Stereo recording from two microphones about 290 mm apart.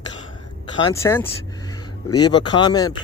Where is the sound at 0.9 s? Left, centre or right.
Centre.